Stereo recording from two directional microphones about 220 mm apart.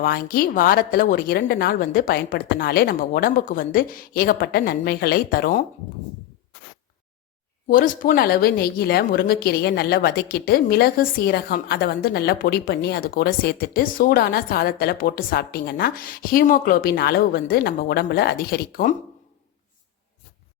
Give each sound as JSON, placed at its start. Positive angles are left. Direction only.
{"t": 0.0, "sound": "speech", "side_deg": 45}
{"t": 7.7, "sound": "a woman's voice", "side_deg": 40}